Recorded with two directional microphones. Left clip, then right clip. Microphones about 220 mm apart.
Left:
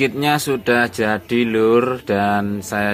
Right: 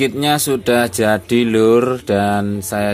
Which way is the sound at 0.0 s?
Centre (ahead or behind).